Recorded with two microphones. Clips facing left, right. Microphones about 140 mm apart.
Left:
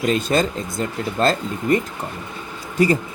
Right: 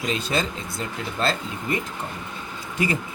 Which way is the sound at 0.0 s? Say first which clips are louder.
Left 7 dB; 45° left (ahead or behind).